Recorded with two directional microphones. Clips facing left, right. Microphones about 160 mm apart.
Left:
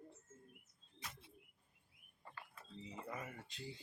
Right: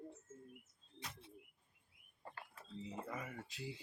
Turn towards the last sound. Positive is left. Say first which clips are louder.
# right 3 dB
turn(degrees=-5)  # may be behind; listen again after turning